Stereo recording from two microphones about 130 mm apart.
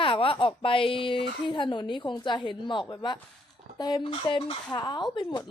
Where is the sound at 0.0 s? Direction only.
45° left (ahead or behind).